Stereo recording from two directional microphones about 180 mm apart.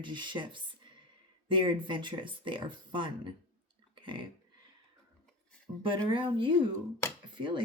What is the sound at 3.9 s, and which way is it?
Burping, 30° right (ahead or behind).